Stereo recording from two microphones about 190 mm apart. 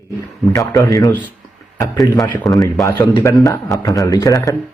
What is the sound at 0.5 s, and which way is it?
Speech, 20° left (ahead or behind).